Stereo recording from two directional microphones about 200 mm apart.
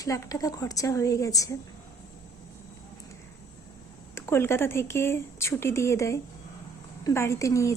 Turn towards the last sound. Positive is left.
turn(degrees=15)  # may be behind; listen again after turning